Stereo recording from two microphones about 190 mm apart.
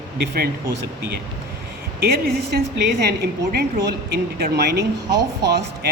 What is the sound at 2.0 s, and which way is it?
Speech, 50° right (ahead or behind).